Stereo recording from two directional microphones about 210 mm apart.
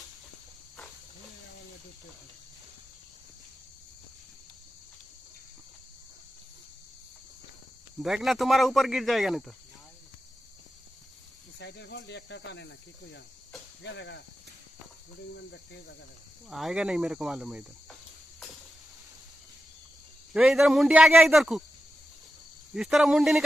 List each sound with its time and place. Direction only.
8.0 s speech: centre (ahead or behind)
11.5 s speech: 55° left (ahead or behind)
15.3 s speech: 55° left (ahead or behind)
16.4 s speech: centre (ahead or behind)
20.3 s speech: 5° right (ahead or behind)
22.8 s speech: centre (ahead or behind)